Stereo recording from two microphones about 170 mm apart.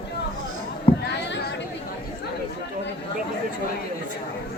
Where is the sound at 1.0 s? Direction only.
90° left.